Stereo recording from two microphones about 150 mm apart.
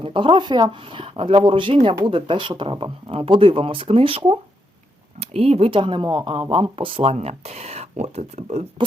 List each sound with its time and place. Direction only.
0.0 s speech: 35° right (ahead or behind)